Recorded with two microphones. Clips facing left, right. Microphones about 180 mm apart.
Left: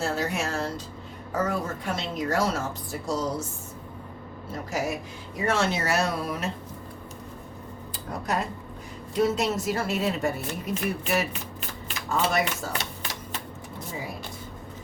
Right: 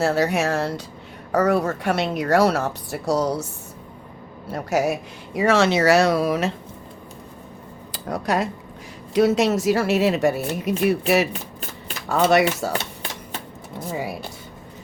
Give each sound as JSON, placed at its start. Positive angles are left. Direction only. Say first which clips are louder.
{"t": 0.0, "sound": "a woman's voice", "louder": "right 8 dB", "side_deg": -70}
{"t": 4.5, "sound": "speech", "louder": "right 8 dB", "side_deg": -70}
{"t": 7.9, "sound": "a woman's voice", "louder": "right 6 dB", "side_deg": -90}
{"t": 13.9, "sound": "a woman's voice", "louder": "right 8 dB", "side_deg": -70}